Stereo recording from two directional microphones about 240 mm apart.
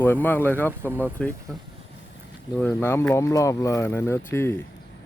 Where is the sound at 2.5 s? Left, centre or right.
Centre.